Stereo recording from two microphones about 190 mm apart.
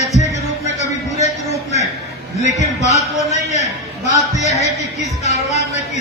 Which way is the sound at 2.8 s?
35° left (ahead or behind).